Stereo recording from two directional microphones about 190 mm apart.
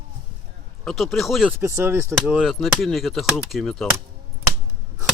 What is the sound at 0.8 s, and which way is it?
Speech, centre (ahead or behind).